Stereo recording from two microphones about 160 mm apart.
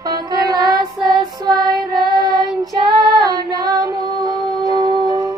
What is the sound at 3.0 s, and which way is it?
Music, 25° right (ahead or behind).